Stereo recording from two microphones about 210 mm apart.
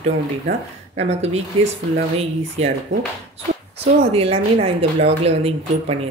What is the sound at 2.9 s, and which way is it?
Speech, 30° right (ahead or behind).